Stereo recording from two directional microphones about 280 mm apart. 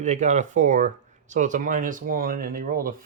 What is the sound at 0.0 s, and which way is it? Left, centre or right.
Speech, right.